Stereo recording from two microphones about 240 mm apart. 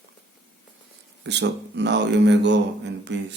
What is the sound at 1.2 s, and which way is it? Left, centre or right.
Speech, right.